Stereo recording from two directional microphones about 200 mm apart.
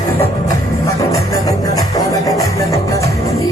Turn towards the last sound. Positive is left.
turn(degrees=15)  # may be behind; listen again after turning